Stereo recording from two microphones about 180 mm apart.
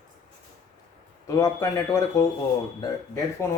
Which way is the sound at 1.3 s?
20° left (ahead or behind).